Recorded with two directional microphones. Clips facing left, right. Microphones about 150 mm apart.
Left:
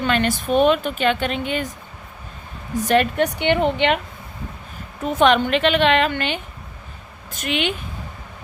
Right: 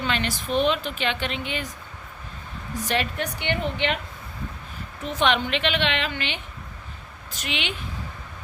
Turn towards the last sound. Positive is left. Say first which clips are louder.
# left 8 dB
turn(degrees=50)  # may be behind; listen again after turning